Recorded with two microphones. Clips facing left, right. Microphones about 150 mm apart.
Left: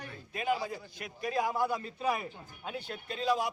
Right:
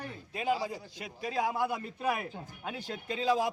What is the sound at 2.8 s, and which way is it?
Speech, 90° right.